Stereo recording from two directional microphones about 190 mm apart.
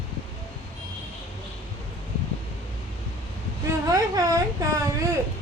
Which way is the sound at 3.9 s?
20° right (ahead or behind).